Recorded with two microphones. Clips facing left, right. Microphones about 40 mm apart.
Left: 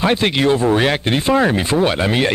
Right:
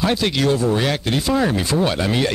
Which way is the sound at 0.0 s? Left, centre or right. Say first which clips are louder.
Left 3 dB; left.